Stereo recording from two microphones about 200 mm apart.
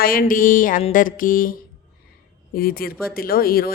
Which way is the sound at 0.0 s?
45° left (ahead or behind).